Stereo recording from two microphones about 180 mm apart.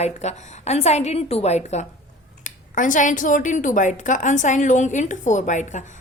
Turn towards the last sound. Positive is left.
turn(degrees=45)  # may be behind; listen again after turning